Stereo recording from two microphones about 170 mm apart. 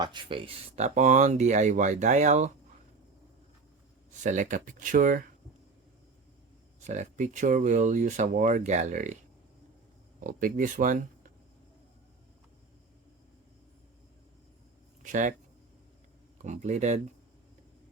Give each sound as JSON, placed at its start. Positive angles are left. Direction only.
{"t": 0.0, "sound": "speech", "side_deg": -25}
{"t": 0.9, "sound": "speech", "side_deg": -45}
{"t": 4.1, "sound": "speech", "side_deg": -45}
{"t": 6.8, "sound": "speech", "side_deg": -45}
{"t": 10.2, "sound": "speech", "side_deg": -50}
{"t": 15.0, "sound": "speech", "side_deg": -50}
{"t": 16.4, "sound": "speech", "side_deg": -45}